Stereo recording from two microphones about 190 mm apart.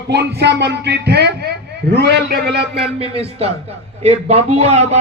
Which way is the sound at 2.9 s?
30° right (ahead or behind).